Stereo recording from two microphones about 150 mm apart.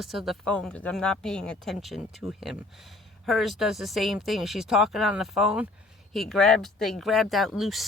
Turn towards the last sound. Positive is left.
turn(degrees=0)  # may be behind; listen again after turning